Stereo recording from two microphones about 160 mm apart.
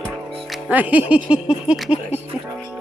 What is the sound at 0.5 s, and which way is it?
Speech, 5° right (ahead or behind).